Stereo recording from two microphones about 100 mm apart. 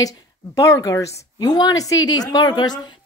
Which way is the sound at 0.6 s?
35° left (ahead or behind).